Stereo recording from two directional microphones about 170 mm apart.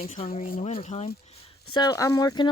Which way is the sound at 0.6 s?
40° left (ahead or behind).